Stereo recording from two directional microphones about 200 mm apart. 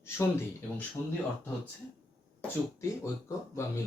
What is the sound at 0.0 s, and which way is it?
Speech, 10° left (ahead or behind).